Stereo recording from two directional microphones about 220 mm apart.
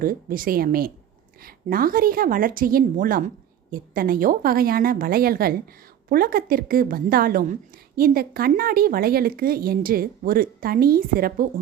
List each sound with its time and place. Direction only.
0.0 s a woman's voice: 40° right (ahead or behind)